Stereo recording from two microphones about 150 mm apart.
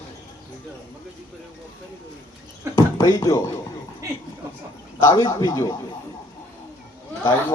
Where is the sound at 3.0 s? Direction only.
20° left (ahead or behind).